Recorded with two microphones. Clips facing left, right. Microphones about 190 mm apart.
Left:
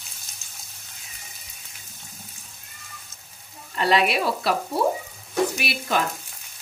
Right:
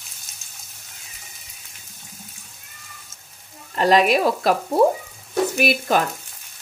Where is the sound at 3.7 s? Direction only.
40° right (ahead or behind).